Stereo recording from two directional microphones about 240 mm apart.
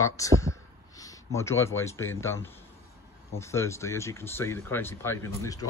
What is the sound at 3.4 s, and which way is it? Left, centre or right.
Speech, centre.